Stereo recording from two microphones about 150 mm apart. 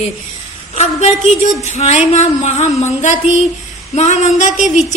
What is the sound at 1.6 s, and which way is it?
A woman's voice, 50° left (ahead or behind).